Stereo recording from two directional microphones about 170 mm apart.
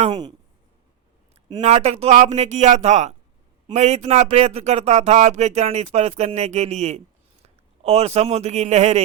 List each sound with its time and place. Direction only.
0.0 s speech: 30° right (ahead or behind)
1.6 s speech: 40° right (ahead or behind)